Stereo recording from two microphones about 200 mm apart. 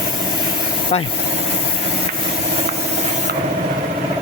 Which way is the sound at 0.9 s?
35° left (ahead or behind).